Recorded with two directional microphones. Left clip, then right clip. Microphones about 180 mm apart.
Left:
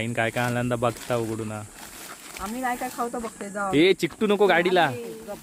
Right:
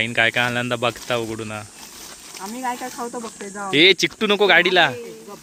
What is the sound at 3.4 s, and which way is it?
Speech, 35° left (ahead or behind).